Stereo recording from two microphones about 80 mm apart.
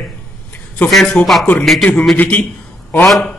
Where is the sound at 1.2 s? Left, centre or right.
Centre.